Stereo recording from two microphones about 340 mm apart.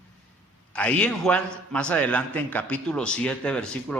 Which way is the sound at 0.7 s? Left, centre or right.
Centre.